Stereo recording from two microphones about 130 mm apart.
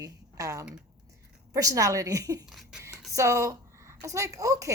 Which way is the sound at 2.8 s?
25° right (ahead or behind).